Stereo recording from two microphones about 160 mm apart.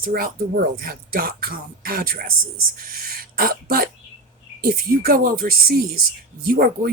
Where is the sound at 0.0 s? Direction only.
65° right (ahead or behind).